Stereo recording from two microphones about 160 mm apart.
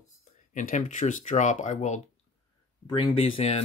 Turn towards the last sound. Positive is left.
turn(degrees=35)  # may be behind; listen again after turning